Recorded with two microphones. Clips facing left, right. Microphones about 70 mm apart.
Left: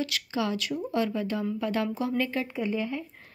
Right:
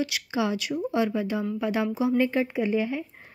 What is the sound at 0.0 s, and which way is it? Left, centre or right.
Speech, centre.